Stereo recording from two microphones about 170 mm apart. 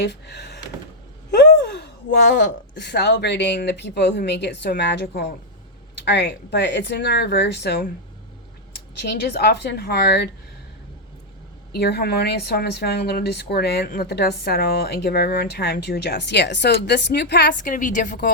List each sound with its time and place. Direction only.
0.0 s a sound: 80° left
1.3 s a woman's voice: 90° left
11.7 s a woman's voice: 75° left (ahead or behind)
17.6 s a woman's voice: 50° left (ahead or behind)